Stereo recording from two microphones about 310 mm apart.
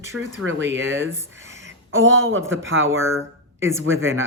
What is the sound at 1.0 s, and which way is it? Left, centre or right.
Speech, centre.